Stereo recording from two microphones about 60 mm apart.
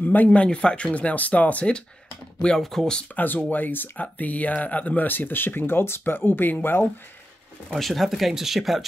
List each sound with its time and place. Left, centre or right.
0.0 s speech: left
2.4 s speech: centre
3.2 s speech: left
7.7 s speech: centre